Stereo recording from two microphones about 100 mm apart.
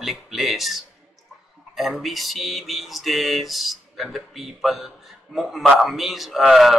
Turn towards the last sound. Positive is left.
turn(degrees=-5)  # may be behind; listen again after turning